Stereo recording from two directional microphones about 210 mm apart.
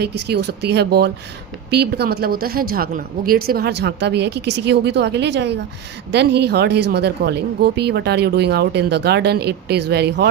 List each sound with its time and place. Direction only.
0.0 s speech: 50° right (ahead or behind)